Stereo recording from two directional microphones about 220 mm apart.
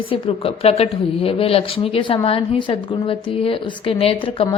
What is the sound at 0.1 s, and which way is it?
A woman's voice, 25° left (ahead or behind).